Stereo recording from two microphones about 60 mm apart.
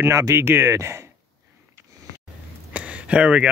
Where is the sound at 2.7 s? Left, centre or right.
Right.